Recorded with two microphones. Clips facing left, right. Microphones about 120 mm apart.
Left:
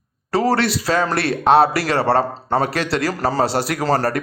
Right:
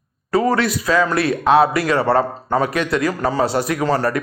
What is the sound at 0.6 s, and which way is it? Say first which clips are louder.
Speech: even; 75° left (ahead or behind).